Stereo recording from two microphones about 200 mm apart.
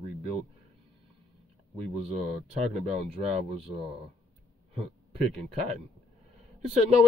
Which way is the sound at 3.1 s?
30° right (ahead or behind).